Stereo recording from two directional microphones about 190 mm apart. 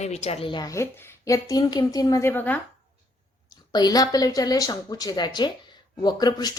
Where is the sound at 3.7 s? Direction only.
20° left (ahead or behind).